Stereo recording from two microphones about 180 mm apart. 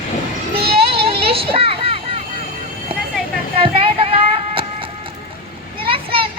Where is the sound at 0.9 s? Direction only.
30° right (ahead or behind).